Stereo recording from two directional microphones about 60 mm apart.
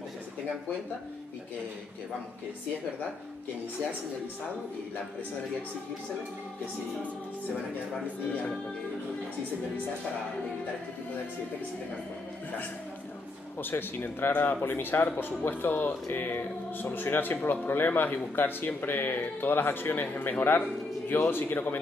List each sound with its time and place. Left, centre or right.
13.6 s speech: left